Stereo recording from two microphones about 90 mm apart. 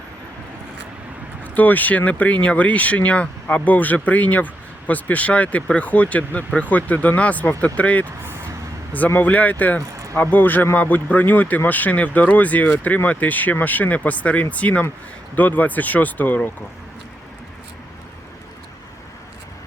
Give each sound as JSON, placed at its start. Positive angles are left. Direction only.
{"t": 1.5, "sound": "speech", "side_deg": 20}